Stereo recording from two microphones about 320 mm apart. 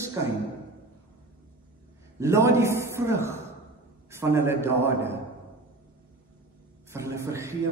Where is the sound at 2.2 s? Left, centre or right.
Centre.